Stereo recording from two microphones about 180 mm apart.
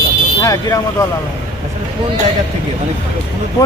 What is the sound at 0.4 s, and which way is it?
Speech, 15° left (ahead or behind).